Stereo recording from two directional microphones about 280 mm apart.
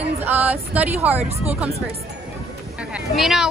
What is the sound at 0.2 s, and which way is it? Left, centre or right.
Speech, centre.